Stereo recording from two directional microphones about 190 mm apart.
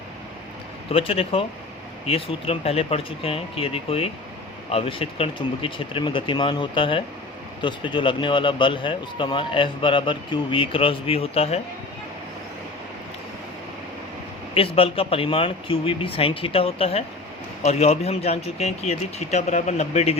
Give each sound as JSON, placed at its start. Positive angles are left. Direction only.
{"t": 0.9, "sound": "a man's voice", "side_deg": 30}
{"t": 14.5, "sound": "a man's voice", "side_deg": 30}